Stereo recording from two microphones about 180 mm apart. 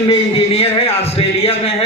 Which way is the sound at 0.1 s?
35° left (ahead or behind).